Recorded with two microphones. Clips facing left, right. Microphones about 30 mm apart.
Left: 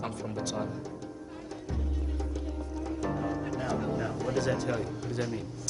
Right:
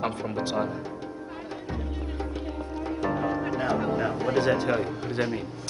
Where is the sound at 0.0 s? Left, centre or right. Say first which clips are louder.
Right 6 dB; right.